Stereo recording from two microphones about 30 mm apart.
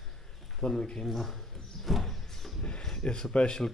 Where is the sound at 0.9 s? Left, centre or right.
Centre.